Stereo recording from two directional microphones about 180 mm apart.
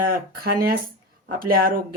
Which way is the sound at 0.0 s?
55° right (ahead or behind).